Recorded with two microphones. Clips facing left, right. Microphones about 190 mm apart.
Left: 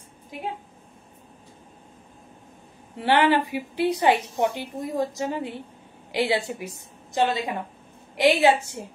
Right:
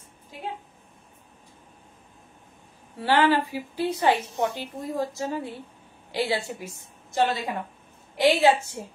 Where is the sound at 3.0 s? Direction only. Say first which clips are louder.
Left 1 dB; 20° left (ahead or behind).